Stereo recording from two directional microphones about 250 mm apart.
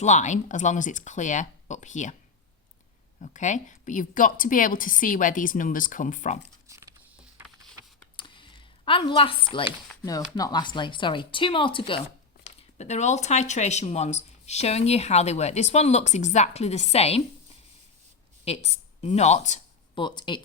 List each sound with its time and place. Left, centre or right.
0.0 s speech: left
3.2 s a woman's voice: left
6.7 s patter: centre
7.3 s a sound: centre
8.1 s a sound: centre
9.9 s speech: centre
18.4 s a woman's voice: left